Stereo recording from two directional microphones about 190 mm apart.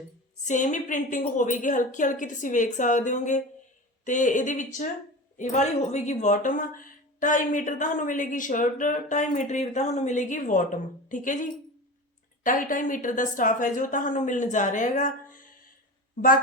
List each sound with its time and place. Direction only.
0.4 s a woman's voice: 40° left (ahead or behind)